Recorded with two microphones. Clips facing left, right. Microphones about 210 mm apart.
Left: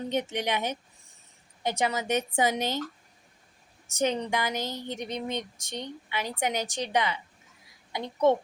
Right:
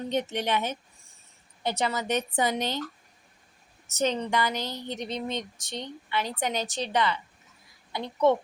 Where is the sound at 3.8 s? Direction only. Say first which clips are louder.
Even; 15° left (ahead or behind).